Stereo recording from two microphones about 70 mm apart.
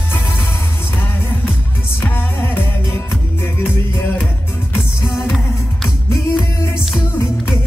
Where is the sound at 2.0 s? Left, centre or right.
Left.